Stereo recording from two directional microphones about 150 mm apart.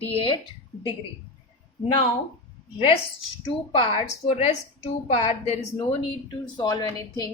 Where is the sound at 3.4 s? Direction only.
35° left (ahead or behind).